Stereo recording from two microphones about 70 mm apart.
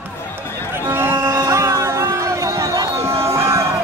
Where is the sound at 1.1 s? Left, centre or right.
Right.